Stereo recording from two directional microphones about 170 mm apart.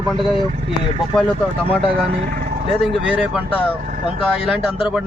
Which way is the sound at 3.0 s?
5° right (ahead or behind).